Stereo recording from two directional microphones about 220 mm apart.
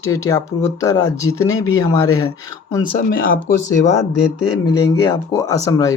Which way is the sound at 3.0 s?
45° left (ahead or behind).